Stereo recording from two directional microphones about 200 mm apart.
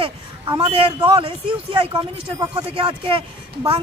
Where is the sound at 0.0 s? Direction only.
25° right (ahead or behind).